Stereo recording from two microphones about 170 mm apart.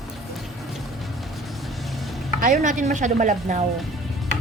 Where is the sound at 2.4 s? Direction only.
50° right (ahead or behind).